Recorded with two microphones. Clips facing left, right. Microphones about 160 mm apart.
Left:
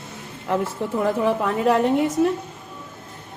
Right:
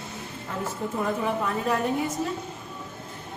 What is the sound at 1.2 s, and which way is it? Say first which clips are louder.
Speech: left 7 dB; 85° left.